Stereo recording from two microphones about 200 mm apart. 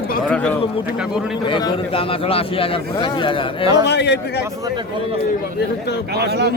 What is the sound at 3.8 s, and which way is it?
Speech, 60° left (ahead or behind).